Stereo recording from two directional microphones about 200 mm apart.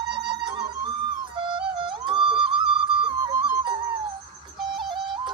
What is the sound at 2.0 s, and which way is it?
Music, 25° right (ahead or behind).